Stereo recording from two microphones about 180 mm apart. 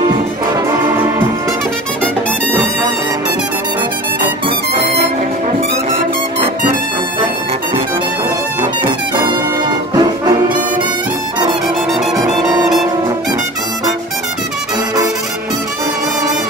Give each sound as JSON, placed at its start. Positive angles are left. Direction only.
{"t": 9.7, "sound": "brass instrument", "side_deg": -25}